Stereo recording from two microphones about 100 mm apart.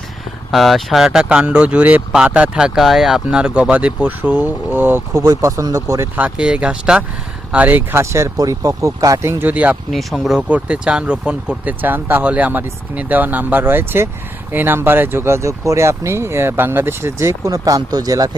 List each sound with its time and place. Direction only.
0.5 s speech: centre (ahead or behind); by 5.2 s 20° right (ahead or behind)
5.2 s speech: 35° right (ahead or behind)
6.1 s speech: 15° right (ahead or behind); by 9.4 s 30° right (ahead or behind)
9.4 s speech: 15° right (ahead or behind)
9.9 s speech: centre (ahead or behind); by 18.3 s 40° right (ahead or behind)